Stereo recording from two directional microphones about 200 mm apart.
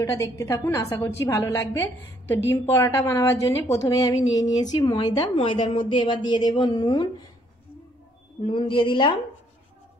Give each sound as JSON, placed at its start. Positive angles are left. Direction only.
{"t": 0.0, "sound": "a woman's voice", "side_deg": 15}
{"t": 8.5, "sound": "a woman's voice", "side_deg": 25}